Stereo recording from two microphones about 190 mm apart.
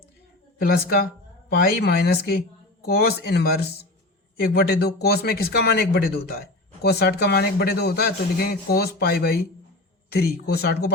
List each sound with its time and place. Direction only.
0.6 s speech: 50° left (ahead or behind)